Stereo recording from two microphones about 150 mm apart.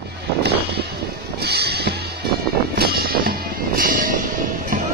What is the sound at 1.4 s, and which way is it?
Music, 90° right.